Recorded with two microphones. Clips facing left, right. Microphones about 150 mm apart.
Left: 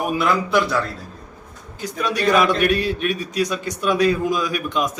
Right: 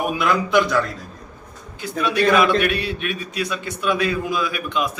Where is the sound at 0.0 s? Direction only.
Centre (ahead or behind).